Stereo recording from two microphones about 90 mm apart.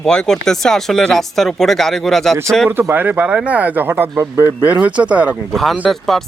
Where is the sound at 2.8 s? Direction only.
20° right (ahead or behind).